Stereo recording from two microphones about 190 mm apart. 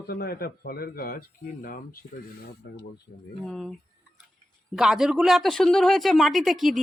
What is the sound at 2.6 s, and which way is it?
Speech, 65° left (ahead or behind).